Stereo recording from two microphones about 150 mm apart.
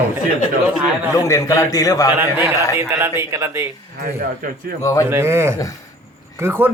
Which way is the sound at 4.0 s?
75° right (ahead or behind).